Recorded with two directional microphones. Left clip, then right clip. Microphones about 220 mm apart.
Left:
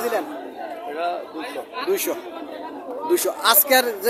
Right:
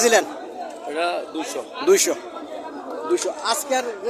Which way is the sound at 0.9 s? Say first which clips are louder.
Right 2 dB; 45° right (ahead or behind).